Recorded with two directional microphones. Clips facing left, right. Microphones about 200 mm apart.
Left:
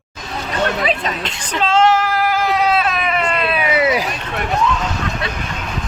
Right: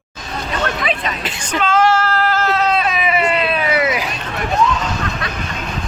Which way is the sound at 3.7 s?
30° left (ahead or behind).